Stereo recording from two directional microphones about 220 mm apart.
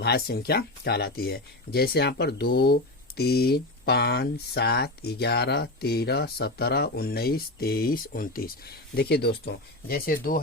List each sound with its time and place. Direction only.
0.0 s speech: 45° left (ahead or behind)